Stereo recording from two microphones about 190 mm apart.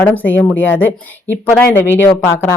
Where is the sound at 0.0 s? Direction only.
10° left (ahead or behind).